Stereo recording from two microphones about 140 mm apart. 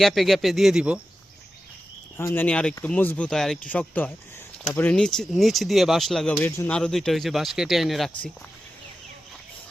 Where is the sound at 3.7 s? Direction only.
15° left (ahead or behind).